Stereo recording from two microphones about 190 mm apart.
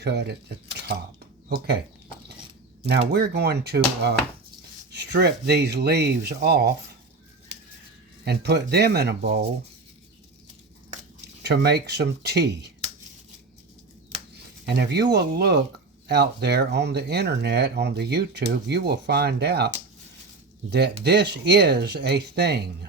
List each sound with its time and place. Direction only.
0.0 s speech: 60° right (ahead or behind)
2.8 s speech: 60° right (ahead or behind)
8.2 s speech: 60° right (ahead or behind)
11.4 s speech: 60° right (ahead or behind)
14.3 s speech: 60° right (ahead or behind)